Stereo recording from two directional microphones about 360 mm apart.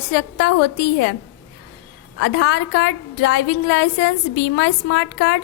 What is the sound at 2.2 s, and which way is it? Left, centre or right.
A woman's voice, left.